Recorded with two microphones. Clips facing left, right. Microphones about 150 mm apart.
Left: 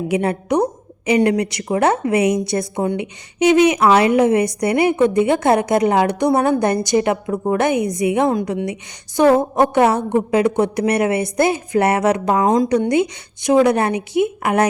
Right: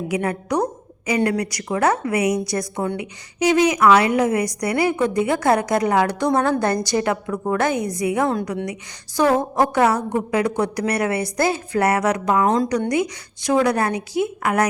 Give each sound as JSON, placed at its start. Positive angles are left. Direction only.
{"t": 0.1, "sound": "a woman's voice", "side_deg": 25}